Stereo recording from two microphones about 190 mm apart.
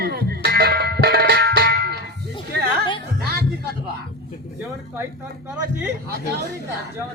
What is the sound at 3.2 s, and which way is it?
Music, 55° right (ahead or behind).